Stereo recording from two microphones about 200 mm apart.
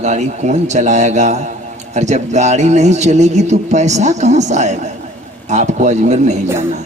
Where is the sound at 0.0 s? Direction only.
35° right (ahead or behind).